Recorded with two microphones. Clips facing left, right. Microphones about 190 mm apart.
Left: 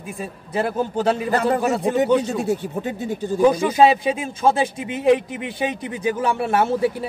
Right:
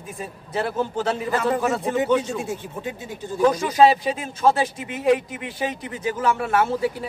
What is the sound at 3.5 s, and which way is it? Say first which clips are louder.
Speech: left 4 dB; 30° left (ahead or behind).